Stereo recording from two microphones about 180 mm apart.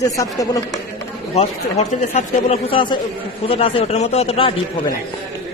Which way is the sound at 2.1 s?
35° left (ahead or behind).